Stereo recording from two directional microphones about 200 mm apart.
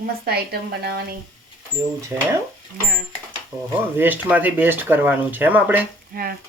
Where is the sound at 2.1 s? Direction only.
10° right (ahead or behind).